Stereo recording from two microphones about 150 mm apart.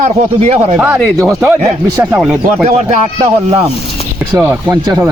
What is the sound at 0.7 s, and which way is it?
Speech, 10° right (ahead or behind).